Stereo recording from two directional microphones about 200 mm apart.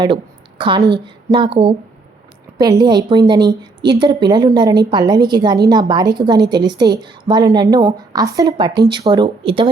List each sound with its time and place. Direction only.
0.6 s a woman's voice: 25° right (ahead or behind)